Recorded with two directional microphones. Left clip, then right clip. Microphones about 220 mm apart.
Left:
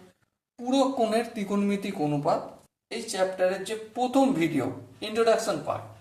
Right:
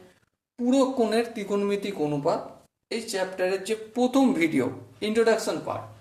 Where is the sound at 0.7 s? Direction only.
15° right (ahead or behind).